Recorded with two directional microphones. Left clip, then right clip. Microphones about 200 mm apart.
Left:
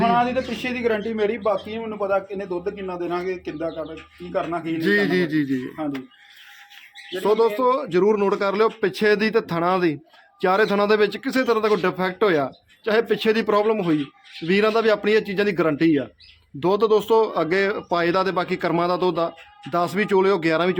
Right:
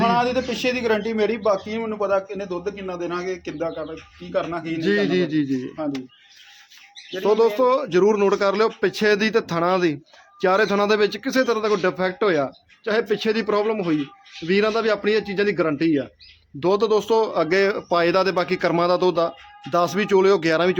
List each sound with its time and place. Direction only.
0.1 s a man's voice: 45° right (ahead or behind)
4.8 s a man's voice: centre (ahead or behind)
7.2 s a man's voice: centre (ahead or behind)